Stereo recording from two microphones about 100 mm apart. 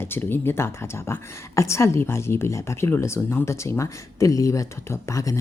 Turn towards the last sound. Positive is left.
turn(degrees=35)  # may be behind; listen again after turning